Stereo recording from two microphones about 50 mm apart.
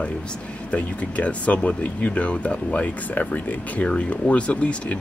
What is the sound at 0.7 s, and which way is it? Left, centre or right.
Speech, left.